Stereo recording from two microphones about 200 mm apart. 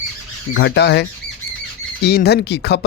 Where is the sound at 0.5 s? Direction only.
60° left (ahead or behind).